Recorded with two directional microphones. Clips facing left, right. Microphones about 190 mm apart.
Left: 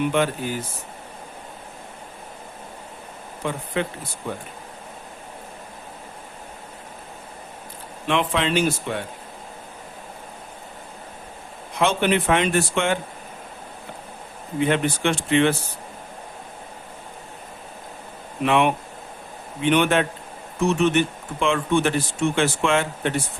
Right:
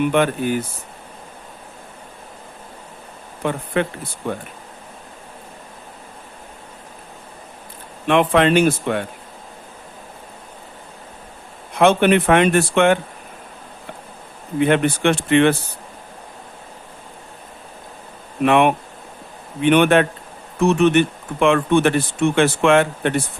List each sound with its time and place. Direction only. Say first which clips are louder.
0.1 s speech: right 5 dB; 60° right (ahead or behind)
3.4 s speech: right 5 dB; 65° right (ahead or behind)
8.0 s speech: right 7 dB; 55° right (ahead or behind)
11.7 s speech: right 6 dB; 60° right (ahead or behind)
14.6 s speech: right 5 dB; 60° right (ahead or behind)
18.4 s speech: right 4 dB; 55° right (ahead or behind)